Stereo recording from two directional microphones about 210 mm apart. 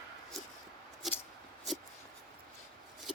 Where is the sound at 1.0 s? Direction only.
Centre (ahead or behind).